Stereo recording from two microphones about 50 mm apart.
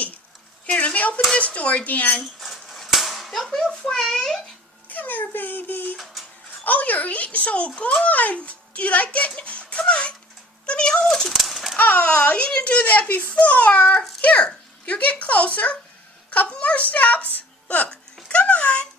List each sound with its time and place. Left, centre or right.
0.7 s dishes: left
1.4 s a child's voice: left
2.2 s dishes: centre
3.7 s a child's voice: centre
4.9 s a child's voice: left; by 11.1 s centre
11.1 s a sound: centre
11.8 s a child's voice: left
18.3 s a sound: left